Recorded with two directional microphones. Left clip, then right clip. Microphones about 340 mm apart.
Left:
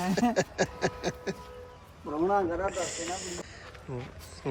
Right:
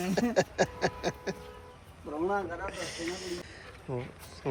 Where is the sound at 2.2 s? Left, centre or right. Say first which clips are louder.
Left 6 dB; left.